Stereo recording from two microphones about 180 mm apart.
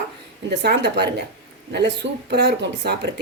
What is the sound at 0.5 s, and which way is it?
Speech, 70° right (ahead or behind).